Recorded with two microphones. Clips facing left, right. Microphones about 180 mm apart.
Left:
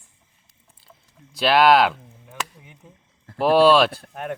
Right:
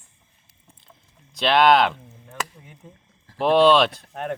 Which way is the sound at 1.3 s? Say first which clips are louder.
Left 1 dB; 5° left (ahead or behind).